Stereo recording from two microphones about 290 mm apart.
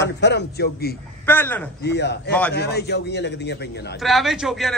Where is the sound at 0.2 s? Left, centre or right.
Left.